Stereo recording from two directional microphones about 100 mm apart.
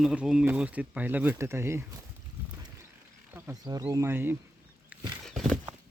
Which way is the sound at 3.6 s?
35° right (ahead or behind).